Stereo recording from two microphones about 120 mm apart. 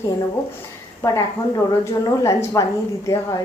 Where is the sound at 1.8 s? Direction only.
25° left (ahead or behind).